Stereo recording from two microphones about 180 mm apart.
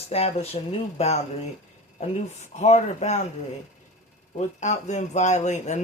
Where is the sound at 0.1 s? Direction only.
35° left (ahead or behind).